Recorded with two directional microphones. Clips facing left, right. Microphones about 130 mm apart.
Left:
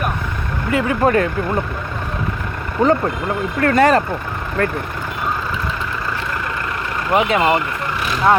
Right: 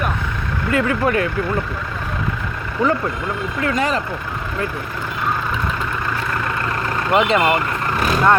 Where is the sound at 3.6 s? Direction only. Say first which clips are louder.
Left 7 dB; 65° left (ahead or behind).